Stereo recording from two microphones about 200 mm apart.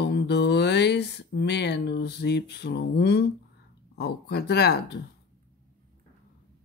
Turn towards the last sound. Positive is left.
turn(degrees=55)  # may be behind; listen again after turning